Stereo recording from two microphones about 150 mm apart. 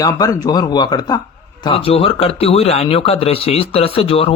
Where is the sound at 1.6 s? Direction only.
40° left (ahead or behind).